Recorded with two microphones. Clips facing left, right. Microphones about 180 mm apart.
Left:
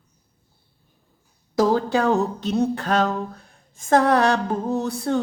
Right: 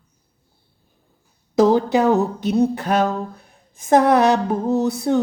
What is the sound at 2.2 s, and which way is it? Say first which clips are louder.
Mantra: right 4 dB; 10° right (ahead or behind).